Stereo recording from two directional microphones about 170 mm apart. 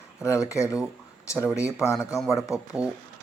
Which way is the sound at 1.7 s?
15° left (ahead or behind).